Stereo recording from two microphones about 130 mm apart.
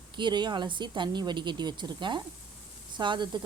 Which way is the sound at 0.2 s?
35° right (ahead or behind).